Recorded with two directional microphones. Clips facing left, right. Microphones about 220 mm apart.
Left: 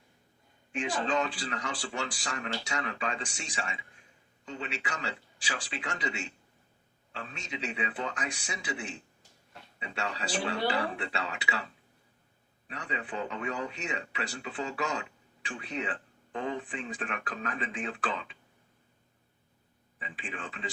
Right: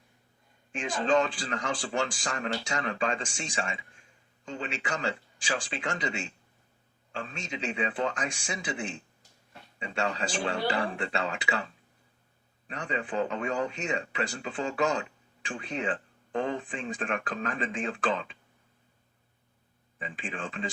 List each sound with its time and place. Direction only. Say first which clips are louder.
0.8 s speech: right 4 dB; 50° right (ahead or behind)
12.6 s speech: right 5 dB; 50° right (ahead or behind)
20.1 s speech: right 5 dB; 50° right (ahead or behind)